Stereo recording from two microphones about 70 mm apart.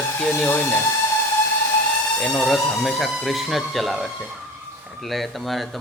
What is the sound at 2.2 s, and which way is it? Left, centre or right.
A man's voice, centre.